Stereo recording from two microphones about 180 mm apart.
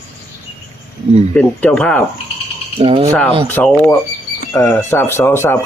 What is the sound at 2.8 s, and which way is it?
Speech, 30° right (ahead or behind).